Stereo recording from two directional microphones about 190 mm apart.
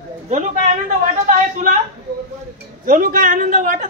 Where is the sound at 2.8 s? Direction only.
45° right (ahead or behind).